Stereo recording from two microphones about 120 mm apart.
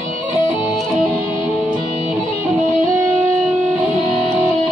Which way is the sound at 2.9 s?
15° right (ahead or behind).